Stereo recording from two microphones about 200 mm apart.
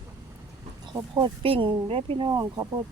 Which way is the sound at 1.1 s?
25° right (ahead or behind).